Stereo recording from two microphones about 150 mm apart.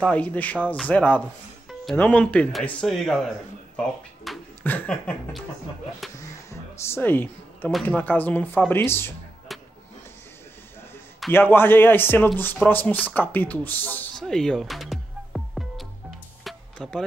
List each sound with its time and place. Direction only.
0.0 s speech: 10° left (ahead or behind)
3.7 s drawer open or close: centre (ahead or behind)
4.6 s speech: 10° left (ahead or behind)
6.1 s a sound: 20° left (ahead or behind)
7.8 s speech: 10° left (ahead or behind)
9.5 s music: centre (ahead or behind)
11.3 s speech: 15° left (ahead or behind)
14.2 s music: 5° left (ahead or behind)